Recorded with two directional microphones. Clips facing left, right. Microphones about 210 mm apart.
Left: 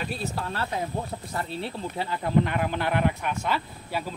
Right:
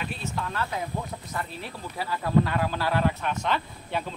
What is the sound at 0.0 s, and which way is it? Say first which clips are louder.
Speech: left 2 dB; 35° left (ahead or behind).